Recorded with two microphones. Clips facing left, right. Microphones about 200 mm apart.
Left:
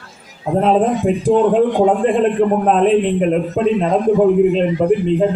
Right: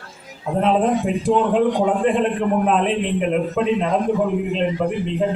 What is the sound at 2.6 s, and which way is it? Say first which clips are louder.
A man's voice: left 6 dB; 40° left (ahead or behind).